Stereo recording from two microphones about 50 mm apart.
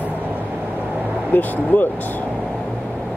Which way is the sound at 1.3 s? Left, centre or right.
Left.